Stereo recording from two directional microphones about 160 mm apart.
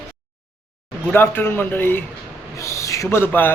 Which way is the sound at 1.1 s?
15° left (ahead or behind).